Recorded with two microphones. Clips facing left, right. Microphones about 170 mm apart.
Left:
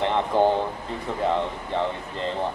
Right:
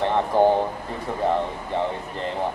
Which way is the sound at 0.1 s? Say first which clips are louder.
Right 3 dB; 15° right (ahead or behind).